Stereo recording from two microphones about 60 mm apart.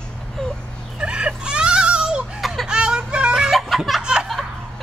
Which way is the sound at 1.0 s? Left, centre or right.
Centre.